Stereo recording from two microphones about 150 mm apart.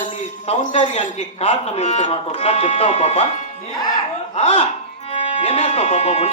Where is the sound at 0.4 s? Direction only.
50° left (ahead or behind).